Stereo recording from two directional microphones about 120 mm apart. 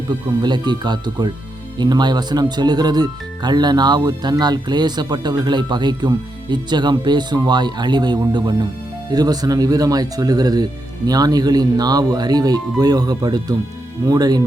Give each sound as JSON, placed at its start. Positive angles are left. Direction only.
{"t": 0.1, "sound": "speech", "side_deg": -35}